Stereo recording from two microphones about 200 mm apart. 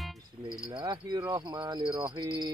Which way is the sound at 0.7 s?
20° right (ahead or behind).